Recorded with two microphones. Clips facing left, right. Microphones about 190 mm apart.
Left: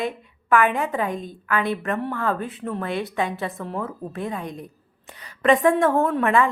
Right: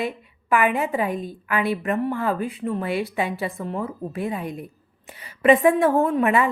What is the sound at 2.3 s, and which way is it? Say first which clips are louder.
A woman's voice: right 3 dB; centre (ahead or behind).